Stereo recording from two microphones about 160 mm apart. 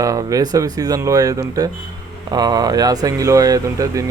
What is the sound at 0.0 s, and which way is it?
Speech, 20° right (ahead or behind).